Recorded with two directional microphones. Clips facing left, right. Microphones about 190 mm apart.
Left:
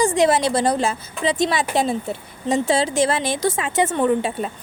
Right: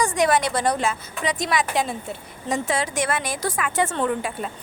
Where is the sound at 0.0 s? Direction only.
25° left (ahead or behind).